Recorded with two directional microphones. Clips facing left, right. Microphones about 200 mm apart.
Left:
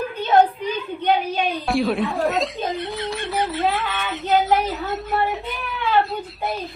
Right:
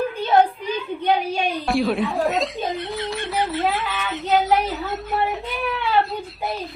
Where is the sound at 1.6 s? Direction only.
Centre (ahead or behind).